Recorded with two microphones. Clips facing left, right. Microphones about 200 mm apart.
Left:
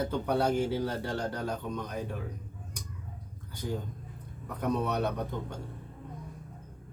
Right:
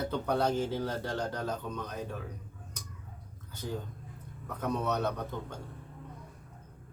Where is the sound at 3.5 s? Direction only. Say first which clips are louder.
Left 2 dB; 15° left (ahead or behind).